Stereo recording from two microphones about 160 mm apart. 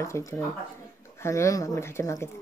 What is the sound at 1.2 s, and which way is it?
Speech, 20° left (ahead or behind).